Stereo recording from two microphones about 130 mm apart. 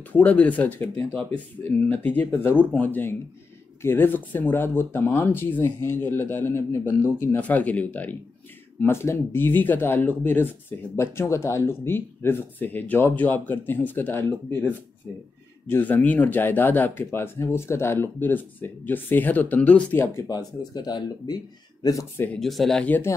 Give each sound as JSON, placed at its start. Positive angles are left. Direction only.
{"t": 0.1, "sound": "speech", "side_deg": 10}
{"t": 15.7, "sound": "speech", "side_deg": 15}
{"t": 20.2, "sound": "speech", "side_deg": 30}
{"t": 22.4, "sound": "speech", "side_deg": 0}